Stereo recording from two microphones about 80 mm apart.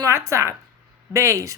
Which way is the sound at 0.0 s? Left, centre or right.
Right.